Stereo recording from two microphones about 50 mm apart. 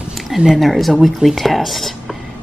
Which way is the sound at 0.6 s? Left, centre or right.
Centre.